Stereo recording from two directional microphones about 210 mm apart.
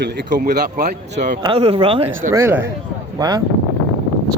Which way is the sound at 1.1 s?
35° right (ahead or behind).